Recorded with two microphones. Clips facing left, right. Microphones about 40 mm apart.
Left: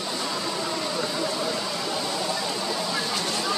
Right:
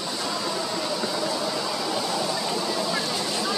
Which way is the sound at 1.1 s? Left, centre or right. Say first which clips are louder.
Even; centre.